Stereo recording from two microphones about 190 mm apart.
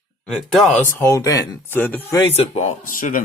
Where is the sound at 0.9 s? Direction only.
15° left (ahead or behind).